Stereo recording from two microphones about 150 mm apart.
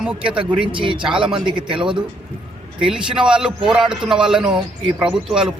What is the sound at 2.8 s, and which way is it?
Speech, 5° right (ahead or behind).